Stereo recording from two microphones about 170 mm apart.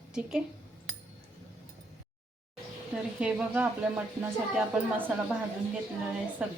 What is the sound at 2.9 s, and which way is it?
Speech, 5° right (ahead or behind).